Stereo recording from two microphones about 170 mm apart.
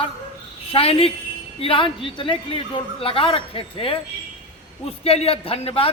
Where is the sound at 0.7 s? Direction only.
35° left (ahead or behind).